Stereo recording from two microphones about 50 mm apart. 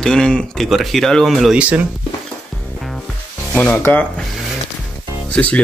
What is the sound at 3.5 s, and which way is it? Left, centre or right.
Speech, left.